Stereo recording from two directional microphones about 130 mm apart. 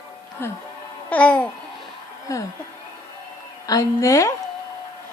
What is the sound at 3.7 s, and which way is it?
Speech, 25° left (ahead or behind).